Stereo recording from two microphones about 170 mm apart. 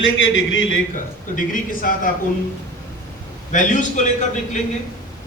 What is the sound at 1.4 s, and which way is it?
Speech, 55° left (ahead or behind).